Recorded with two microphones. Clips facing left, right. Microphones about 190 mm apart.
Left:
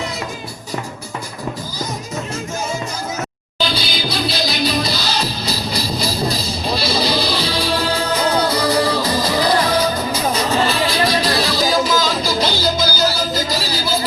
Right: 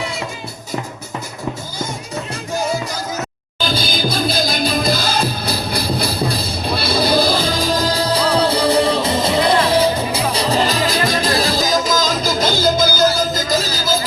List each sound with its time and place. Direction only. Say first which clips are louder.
3.6 s music: right 2 dB; 50° right (ahead or behind)